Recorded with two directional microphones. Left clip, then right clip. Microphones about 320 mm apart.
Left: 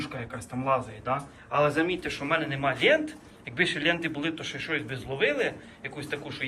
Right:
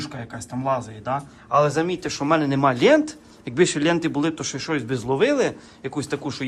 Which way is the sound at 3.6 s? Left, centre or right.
Centre.